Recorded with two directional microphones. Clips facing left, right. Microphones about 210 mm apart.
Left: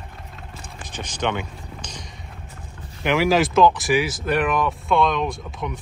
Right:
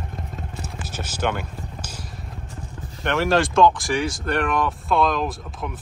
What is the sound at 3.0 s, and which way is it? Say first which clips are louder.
Speech: left 2 dB; centre (ahead or behind).